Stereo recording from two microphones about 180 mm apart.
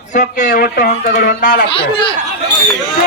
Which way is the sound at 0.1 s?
45° left (ahead or behind).